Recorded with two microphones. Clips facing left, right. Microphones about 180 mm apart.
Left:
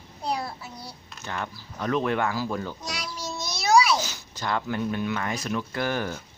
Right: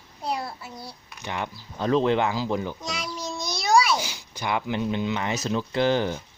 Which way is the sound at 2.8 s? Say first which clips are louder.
Right 2 dB; centre (ahead or behind).